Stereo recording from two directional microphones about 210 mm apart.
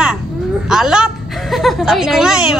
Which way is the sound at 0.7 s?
5° right (ahead or behind).